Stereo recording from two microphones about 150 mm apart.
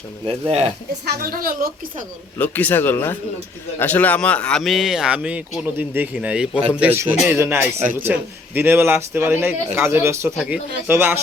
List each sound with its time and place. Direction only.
0.3 s speech: 40° right (ahead or behind)
1.0 s a woman's voice: 85° right
2.4 s a man's voice: 10° left (ahead or behind); by 11.2 s 15° right (ahead or behind)